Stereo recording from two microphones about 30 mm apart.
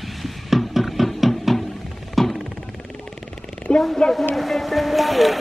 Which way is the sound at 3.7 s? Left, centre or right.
Left.